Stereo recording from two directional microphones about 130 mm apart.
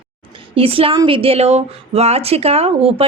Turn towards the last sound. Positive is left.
turn(degrees=-50)  # may be behind; listen again after turning